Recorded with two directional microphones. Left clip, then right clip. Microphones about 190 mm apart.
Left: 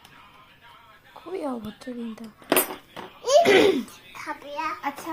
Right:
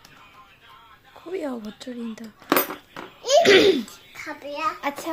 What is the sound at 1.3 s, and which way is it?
Speech, 20° right (ahead or behind).